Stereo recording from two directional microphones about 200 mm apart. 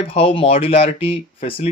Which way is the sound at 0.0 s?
30° left (ahead or behind).